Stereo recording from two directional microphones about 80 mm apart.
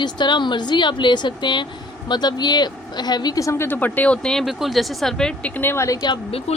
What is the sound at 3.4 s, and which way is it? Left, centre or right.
Speech, left.